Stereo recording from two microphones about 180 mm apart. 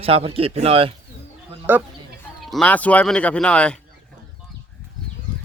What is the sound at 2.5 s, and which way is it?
Speech, 5° left (ahead or behind).